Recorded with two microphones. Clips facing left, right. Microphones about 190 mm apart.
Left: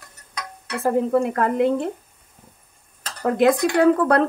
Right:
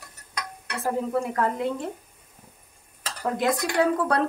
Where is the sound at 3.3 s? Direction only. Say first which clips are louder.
Left 7 dB; 60° left (ahead or behind).